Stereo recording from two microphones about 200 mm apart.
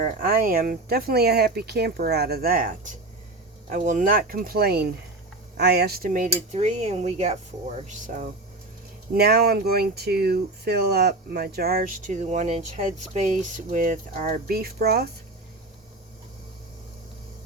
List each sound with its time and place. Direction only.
0.0 s speech: 45° right (ahead or behind)
9.1 s speech: 50° right (ahead or behind)